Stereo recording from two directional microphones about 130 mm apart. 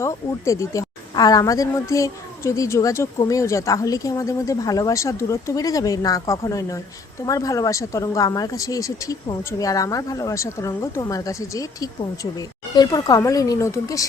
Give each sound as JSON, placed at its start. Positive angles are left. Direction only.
{"t": 0.0, "sound": "speech", "side_deg": 25}